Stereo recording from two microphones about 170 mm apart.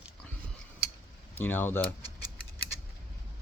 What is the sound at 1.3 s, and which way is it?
Speech, 10° left (ahead or behind).